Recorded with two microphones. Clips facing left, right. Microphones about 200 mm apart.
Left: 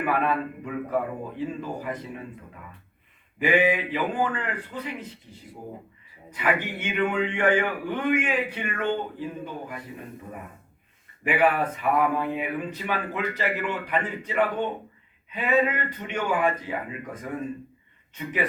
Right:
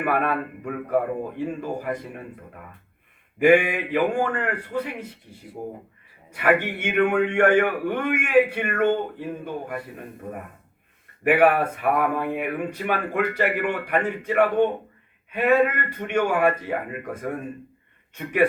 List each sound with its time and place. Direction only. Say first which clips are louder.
0.0 s speech: right 1 dB; 55° right (ahead or behind)
3.3 s speech: right 5 dB; 50° right (ahead or behind)
4.9 s speech: right 2 dB; 10° right (ahead or behind)
6.3 s speech: right 5 dB; 50° right (ahead or behind)
11.2 s speech: right 5 dB; 60° right (ahead or behind)
18.2 s speech: right 7 dB; 55° right (ahead or behind)